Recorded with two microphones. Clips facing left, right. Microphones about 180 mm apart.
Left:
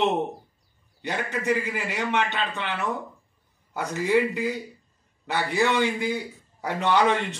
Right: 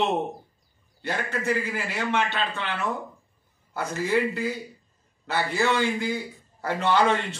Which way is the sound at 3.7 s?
15° left (ahead or behind).